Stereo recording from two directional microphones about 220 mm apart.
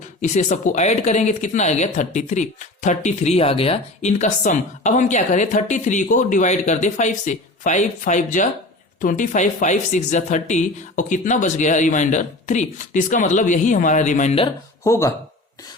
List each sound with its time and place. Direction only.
0.2 s speech: 35° left (ahead or behind)
14.8 s speech: 15° left (ahead or behind)